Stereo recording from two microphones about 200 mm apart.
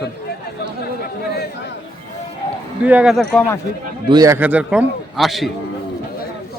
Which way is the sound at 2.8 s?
5° right (ahead or behind).